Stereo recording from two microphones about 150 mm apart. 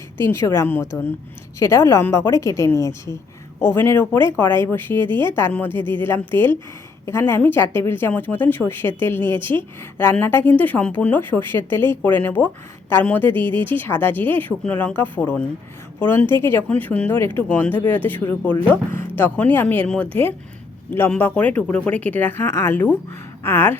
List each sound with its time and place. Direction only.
0.2 s a woman's voice: 15° left (ahead or behind)